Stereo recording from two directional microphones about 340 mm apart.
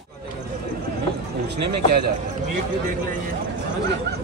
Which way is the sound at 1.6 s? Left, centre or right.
Right.